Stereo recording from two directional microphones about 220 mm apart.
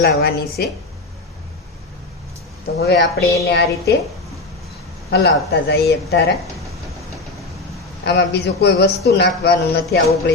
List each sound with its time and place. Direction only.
0.0 s a man's voice: 45° left (ahead or behind)
2.8 s a man's voice: 45° left (ahead or behind)
5.1 s a man's voice: 45° left (ahead or behind)
8.0 s a man's voice: 50° left (ahead or behind)